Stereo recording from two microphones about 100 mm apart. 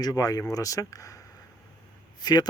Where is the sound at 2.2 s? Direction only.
45° left (ahead or behind).